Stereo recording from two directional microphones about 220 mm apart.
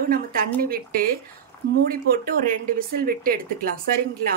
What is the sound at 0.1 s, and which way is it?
Speech, 40° right (ahead or behind).